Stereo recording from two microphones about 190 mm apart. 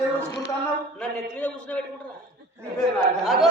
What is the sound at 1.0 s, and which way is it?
Speech, 5° left (ahead or behind).